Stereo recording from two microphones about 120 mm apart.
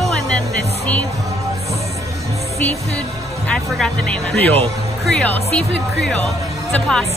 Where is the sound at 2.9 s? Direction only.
10° left (ahead or behind).